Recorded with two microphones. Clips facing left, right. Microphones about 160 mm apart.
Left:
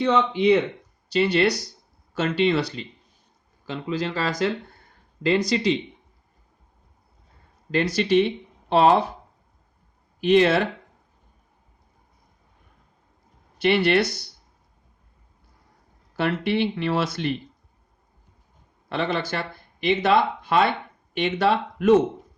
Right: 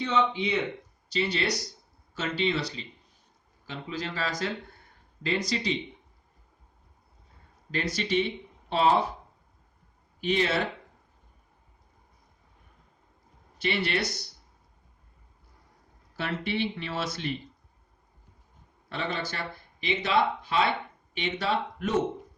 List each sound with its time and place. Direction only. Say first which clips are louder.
0.0 s speech: left 7 dB; 65° left (ahead or behind)
7.7 s speech: left 8 dB; 70° left (ahead or behind)
10.2 s speech: left 9 dB; 70° left (ahead or behind)
13.6 s speech: left 9 dB; 65° left (ahead or behind)
16.1 s speech: left 8 dB; 70° left (ahead or behind)
18.9 s speech: left 7 dB; 70° left (ahead or behind)
19.8 s speech: left 6 dB; 60° left (ahead or behind)